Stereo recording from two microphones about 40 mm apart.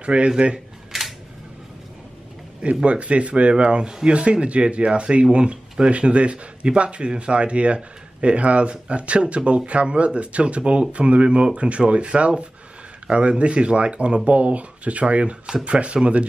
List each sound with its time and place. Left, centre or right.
0.0 s speech: right
0.9 s camera: centre
2.6 s speech: right